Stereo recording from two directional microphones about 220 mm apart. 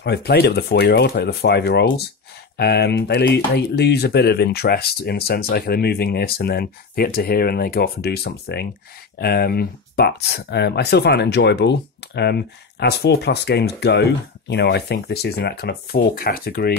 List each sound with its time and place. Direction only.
0.0 s speech: 50° left (ahead or behind)